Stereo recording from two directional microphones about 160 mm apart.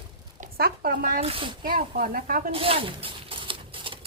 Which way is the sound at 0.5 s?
70° right (ahead or behind).